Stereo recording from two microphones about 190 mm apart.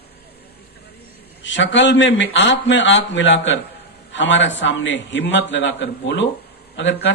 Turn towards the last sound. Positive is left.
turn(degrees=65)  # may be behind; listen again after turning